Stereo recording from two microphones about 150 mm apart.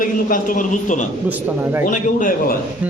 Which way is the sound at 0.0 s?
65° left (ahead or behind).